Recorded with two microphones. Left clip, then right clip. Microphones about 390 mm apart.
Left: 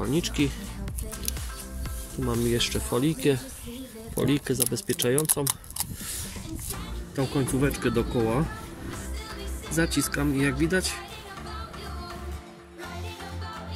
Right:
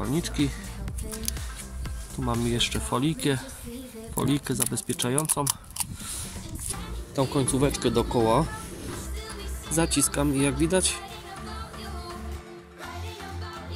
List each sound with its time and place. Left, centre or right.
0.0 s speech: centre
2.2 s speech: centre
7.6 s speech: centre
9.7 s speech: centre